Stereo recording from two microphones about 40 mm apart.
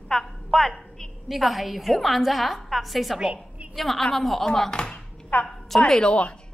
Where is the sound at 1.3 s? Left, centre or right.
Centre.